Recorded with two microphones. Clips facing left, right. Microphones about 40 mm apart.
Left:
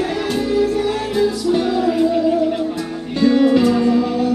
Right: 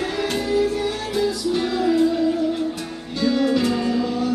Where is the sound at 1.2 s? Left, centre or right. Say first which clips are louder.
Left 4 dB; left.